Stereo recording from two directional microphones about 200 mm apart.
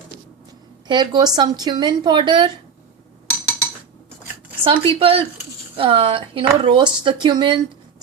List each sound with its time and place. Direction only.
0.9 s speech: 20° right (ahead or behind)
4.6 s speech: 25° right (ahead or behind)